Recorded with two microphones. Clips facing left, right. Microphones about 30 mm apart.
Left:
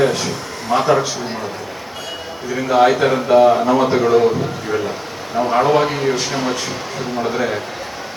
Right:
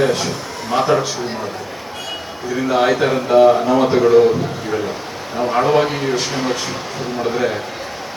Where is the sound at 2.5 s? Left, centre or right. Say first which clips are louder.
Left 2 dB; centre.